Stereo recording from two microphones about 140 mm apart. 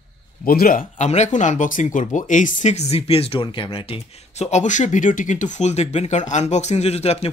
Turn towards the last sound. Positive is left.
turn(degrees=50)  # may be behind; listen again after turning